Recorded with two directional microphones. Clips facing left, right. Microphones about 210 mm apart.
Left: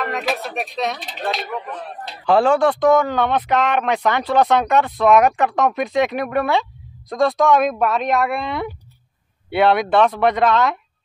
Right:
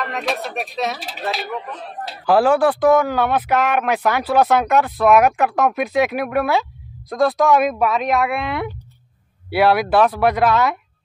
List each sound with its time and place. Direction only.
0.0 s speech: centre (ahead or behind)